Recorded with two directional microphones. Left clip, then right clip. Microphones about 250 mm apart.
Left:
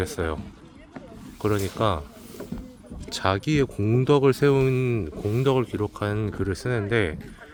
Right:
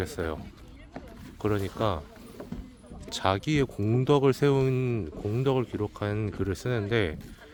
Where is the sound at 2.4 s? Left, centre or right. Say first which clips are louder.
Left 4 dB; right.